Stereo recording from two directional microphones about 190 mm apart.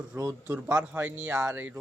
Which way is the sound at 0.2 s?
10° right (ahead or behind).